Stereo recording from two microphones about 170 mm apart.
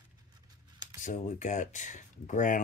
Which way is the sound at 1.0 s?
50° left (ahead or behind).